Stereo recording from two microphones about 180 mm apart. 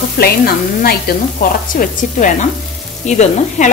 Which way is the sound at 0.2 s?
60° left (ahead or behind).